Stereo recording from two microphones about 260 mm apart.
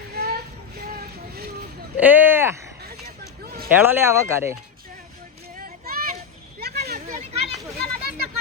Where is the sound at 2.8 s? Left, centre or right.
Right.